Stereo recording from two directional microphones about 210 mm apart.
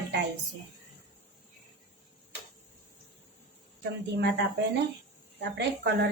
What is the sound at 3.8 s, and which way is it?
Speech, 55° right (ahead or behind).